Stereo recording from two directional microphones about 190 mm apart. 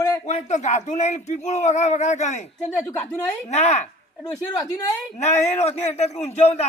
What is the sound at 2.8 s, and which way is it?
Speech, 10° left (ahead or behind).